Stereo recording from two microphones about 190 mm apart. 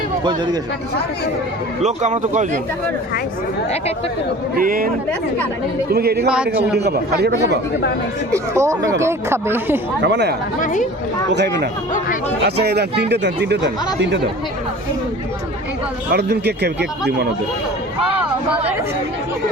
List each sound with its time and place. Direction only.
1.8 s speech: 40° right (ahead or behind)
4.5 s speech: 50° right (ahead or behind)
5.9 s speech: 55° right (ahead or behind)
6.2 s a man's voice: 5° right (ahead or behind)
6.7 s speech: 60° right (ahead or behind)
8.3 s speech: 15° right (ahead or behind)
10.0 s speech: 65° right (ahead or behind)
10.6 s speech: 40° left (ahead or behind)
11.3 s speech: 65° right (ahead or behind)
16.1 s speech: 60° right (ahead or behind)